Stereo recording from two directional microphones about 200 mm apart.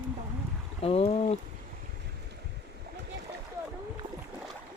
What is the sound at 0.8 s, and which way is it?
Boat, 30° left (ahead or behind).